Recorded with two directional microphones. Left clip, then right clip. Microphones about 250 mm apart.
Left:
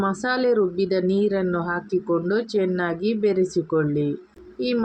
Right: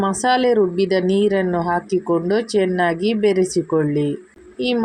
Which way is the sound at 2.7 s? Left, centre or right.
Right.